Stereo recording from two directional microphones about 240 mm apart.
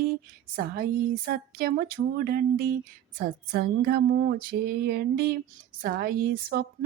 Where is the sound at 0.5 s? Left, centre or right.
Right.